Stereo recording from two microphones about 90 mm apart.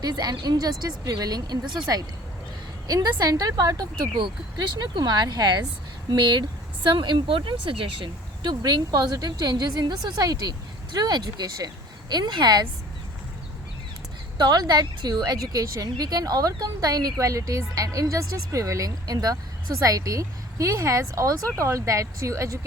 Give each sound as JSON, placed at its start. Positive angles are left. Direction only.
{"t": 0.0, "sound": "a woman's voice", "side_deg": -50}
{"t": 14.3, "sound": "a woman's voice", "side_deg": -50}